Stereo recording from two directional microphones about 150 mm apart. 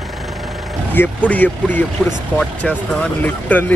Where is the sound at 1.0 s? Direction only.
10° left (ahead or behind).